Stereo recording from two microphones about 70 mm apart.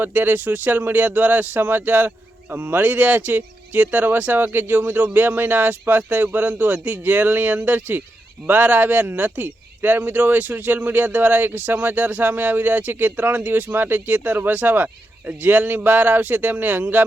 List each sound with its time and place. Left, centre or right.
0.0 s speech: right